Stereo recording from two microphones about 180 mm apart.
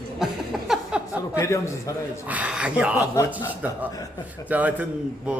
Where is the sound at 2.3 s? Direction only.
5° right (ahead or behind).